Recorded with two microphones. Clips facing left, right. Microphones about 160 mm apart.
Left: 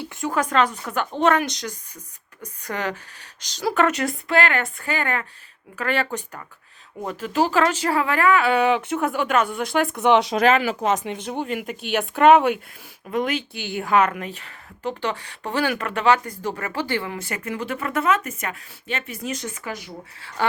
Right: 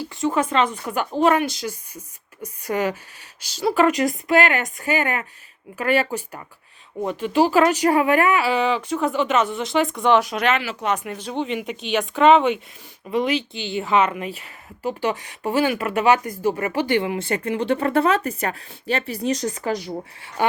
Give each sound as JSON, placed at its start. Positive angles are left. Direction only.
{"t": 0.3, "sound": "a woman's voice", "side_deg": -5}
{"t": 4.0, "sound": "speech", "side_deg": -15}
{"t": 8.4, "sound": "a woman's voice", "side_deg": 0}
{"t": 10.2, "sound": "a woman's voice", "side_deg": 35}
{"t": 20.2, "sound": "speech", "side_deg": -15}